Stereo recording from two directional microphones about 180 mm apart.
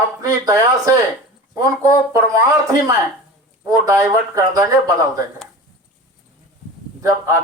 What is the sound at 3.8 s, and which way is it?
Speech, 20° right (ahead or behind).